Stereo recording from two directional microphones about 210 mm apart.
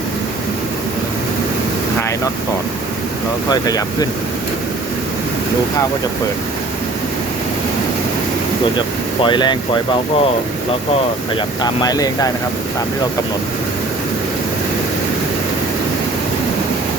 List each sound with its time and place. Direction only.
3.5 s speech: 20° left (ahead or behind)
9.2 s speech: 20° left (ahead or behind)
11.6 s speech: 20° left (ahead or behind)